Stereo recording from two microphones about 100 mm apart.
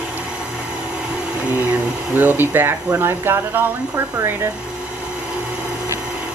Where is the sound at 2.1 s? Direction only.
20° right (ahead or behind).